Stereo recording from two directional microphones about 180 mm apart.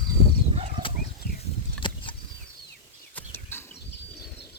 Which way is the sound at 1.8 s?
25° left (ahead or behind).